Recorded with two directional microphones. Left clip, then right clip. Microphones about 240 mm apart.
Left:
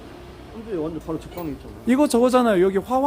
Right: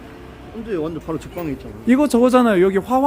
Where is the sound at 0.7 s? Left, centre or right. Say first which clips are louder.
Right 3 dB; right.